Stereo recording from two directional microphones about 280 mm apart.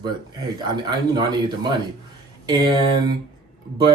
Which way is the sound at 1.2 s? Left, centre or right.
Centre.